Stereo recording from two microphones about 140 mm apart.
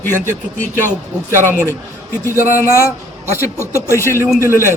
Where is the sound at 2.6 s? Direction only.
20° left (ahead or behind).